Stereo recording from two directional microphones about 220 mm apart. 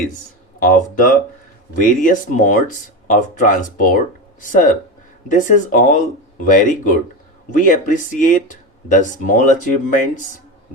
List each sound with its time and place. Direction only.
0.7 s speech: 40° left (ahead or behind)